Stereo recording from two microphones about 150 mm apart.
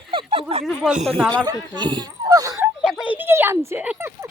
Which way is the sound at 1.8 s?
30° right (ahead or behind).